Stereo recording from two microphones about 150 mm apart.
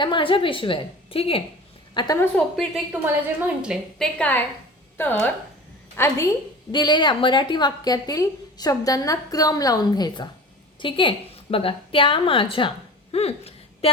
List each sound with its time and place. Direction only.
0.0 s a woman's voice: 35° left (ahead or behind)
2.3 s a woman's voice: centre (ahead or behind)
6.7 s a woman's voice: 30° left (ahead or behind)